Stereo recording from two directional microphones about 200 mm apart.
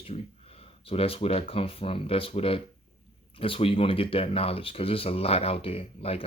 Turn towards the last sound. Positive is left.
turn(degrees=30)  # may be behind; listen again after turning